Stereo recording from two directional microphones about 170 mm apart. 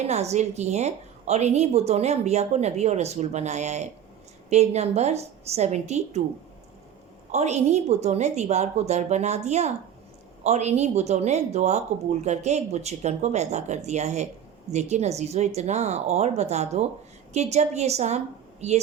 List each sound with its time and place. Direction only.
0.1 s a woman's voice: 40° right (ahead or behind)
7.3 s a woman's voice: 40° right (ahead or behind)